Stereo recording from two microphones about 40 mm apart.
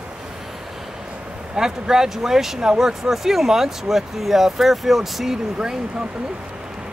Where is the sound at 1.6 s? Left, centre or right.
Centre.